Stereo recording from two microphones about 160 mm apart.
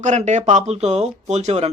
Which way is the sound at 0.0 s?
45° right (ahead or behind).